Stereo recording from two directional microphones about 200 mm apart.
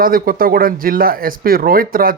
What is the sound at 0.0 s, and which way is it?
Speech, 45° right (ahead or behind).